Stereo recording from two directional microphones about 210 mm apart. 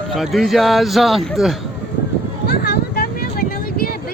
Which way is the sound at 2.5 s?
50° left (ahead or behind).